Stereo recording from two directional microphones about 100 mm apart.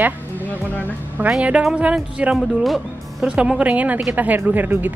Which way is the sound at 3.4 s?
10° right (ahead or behind).